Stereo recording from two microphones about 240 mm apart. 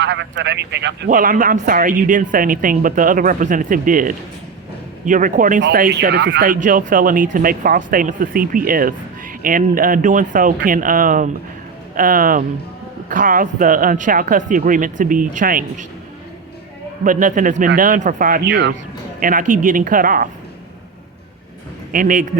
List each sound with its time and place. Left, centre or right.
0.0 s speech: right
17.0 s speech: right
19.2 s speech: right
21.9 s speech: right